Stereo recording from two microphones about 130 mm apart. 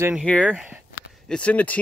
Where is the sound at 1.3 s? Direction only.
10° left (ahead or behind).